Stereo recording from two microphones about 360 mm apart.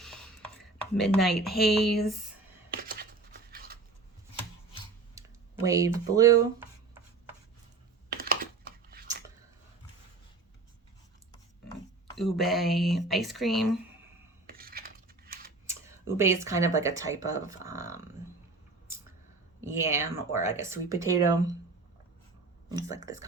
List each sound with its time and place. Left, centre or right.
0.8 s speech: centre
2.6 s computer keyboard: right
3.5 s a sound: right
5.2 s clicking: centre
5.6 s speech: centre
8.1 s a sound: right
12.1 s speech: centre
14.4 s cutlery: right
16.1 s speech: centre
19.6 s speech: centre
22.7 s speech: centre